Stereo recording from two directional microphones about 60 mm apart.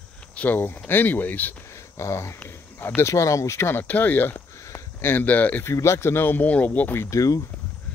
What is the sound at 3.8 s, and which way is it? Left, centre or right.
Speech, left.